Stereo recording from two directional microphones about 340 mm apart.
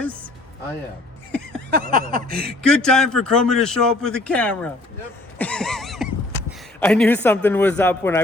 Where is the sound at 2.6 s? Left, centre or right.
Centre.